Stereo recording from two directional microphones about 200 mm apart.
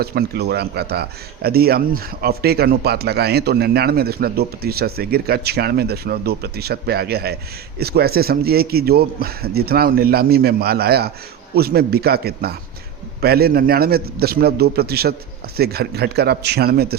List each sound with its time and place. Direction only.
0.0 s speech: 50° right (ahead or behind)